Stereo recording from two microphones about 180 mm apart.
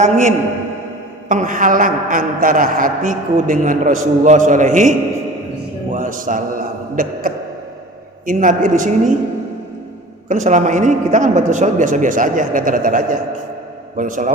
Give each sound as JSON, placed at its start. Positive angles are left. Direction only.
{"t": 0.0, "sound": "a man's voice", "side_deg": -40}
{"t": 10.2, "sound": "a man's voice", "side_deg": -40}